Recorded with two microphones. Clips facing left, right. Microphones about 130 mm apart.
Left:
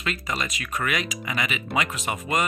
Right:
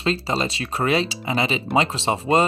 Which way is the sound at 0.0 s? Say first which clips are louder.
Right 7 dB; 30° right (ahead or behind).